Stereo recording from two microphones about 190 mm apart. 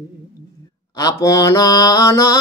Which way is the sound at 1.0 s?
20° left (ahead or behind).